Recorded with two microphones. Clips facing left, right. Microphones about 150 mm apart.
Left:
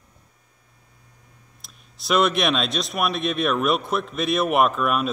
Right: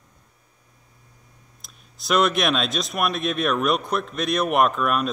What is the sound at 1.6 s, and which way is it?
Speech, centre (ahead or behind).